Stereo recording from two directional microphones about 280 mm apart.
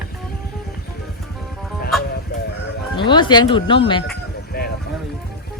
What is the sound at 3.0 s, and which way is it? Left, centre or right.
Speech, centre.